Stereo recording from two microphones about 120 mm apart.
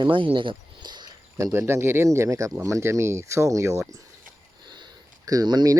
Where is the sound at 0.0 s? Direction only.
45° right (ahead or behind).